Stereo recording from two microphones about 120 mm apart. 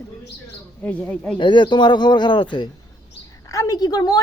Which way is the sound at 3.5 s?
30° left (ahead or behind).